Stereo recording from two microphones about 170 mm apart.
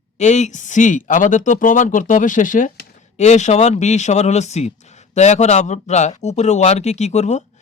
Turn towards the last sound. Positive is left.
turn(degrees=40)  # may be behind; listen again after turning